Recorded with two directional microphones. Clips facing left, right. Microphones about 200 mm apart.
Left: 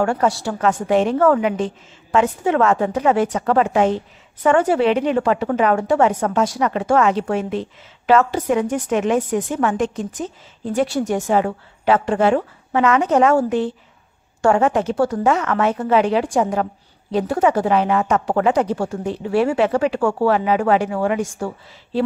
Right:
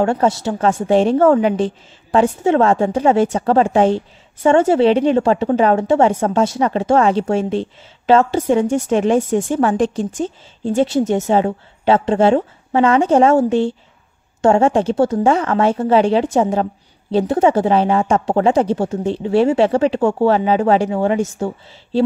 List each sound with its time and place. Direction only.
0.0 s a woman's voice: 25° right (ahead or behind)